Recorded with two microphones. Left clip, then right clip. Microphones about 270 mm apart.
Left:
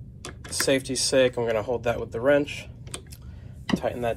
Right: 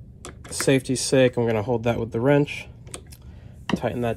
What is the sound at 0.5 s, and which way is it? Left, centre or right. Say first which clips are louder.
Speech: right 2 dB; right.